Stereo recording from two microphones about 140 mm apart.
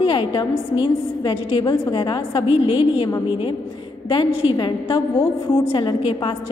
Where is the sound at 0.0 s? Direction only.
40° left (ahead or behind).